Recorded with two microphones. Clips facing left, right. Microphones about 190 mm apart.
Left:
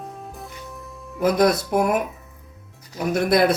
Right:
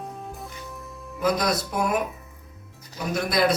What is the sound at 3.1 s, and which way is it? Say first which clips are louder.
Speech: left 5 dB; 55° left (ahead or behind).